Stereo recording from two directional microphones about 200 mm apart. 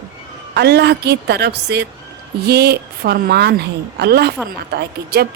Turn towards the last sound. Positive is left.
turn(degrees=-55)  # may be behind; listen again after turning